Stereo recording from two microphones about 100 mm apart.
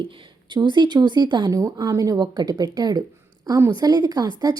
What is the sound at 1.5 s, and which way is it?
A woman's voice, 30° right (ahead or behind).